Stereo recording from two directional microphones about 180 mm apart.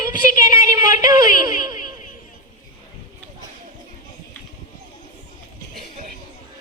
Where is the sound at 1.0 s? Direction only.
20° right (ahead or behind).